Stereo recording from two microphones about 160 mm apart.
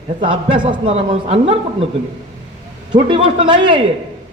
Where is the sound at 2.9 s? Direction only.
30° right (ahead or behind).